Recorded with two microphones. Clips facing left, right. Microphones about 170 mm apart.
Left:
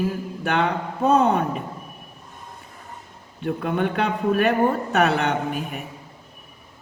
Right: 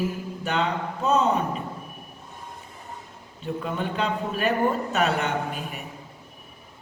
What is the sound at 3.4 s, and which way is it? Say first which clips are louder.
A man's voice: left 5 dB; 60° left (ahead or behind).